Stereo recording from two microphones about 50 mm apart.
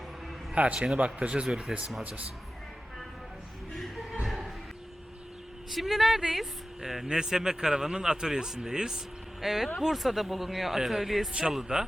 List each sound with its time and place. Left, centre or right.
0.5 s speech: right
1.5 s speech: centre
2.0 s speech: right
3.8 s a sound: centre
5.7 s speech: centre
9.4 s speech: centre
11.5 s speech: centre